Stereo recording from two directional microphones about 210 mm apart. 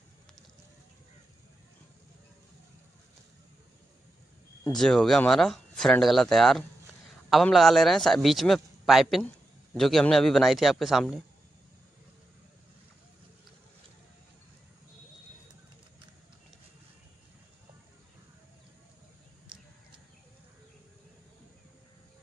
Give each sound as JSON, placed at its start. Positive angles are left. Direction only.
{"t": 4.7, "sound": "a man's voice", "side_deg": 0}